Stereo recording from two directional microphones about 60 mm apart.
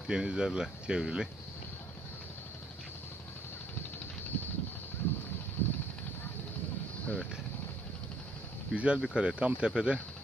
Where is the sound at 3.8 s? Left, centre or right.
Left.